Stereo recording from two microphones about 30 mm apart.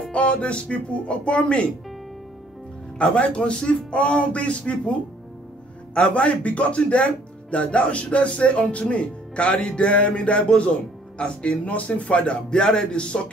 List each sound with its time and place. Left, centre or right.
0.1 s speech: left
3.0 s a man's voice: left
5.9 s a man's voice: left
11.6 s speech: left